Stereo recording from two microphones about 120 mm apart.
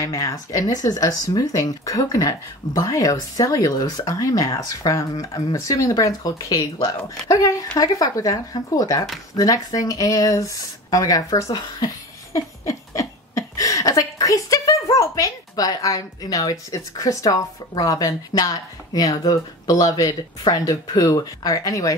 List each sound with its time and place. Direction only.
0.0 s speech: 25° left (ahead or behind)